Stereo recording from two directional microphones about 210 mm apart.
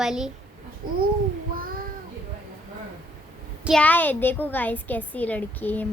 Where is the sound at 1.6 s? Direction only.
45° right (ahead or behind).